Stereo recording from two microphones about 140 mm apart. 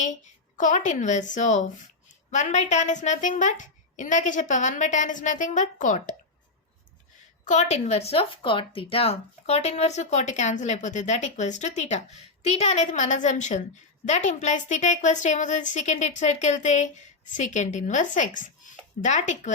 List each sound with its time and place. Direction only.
0.0 s a woman's voice: 60° left (ahead or behind)
7.4 s speech: 60° left (ahead or behind)